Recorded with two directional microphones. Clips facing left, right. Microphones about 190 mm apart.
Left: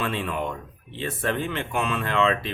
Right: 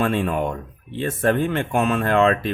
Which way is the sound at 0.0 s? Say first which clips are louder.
Right 6 dB; 45° right (ahead or behind).